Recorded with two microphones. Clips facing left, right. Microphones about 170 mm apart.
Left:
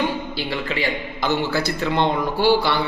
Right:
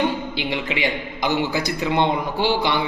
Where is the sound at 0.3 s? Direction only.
15° right (ahead or behind).